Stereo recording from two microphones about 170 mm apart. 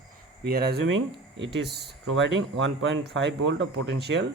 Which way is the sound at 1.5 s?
75° right (ahead or behind).